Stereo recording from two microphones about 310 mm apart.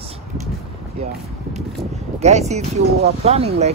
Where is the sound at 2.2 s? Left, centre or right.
Right.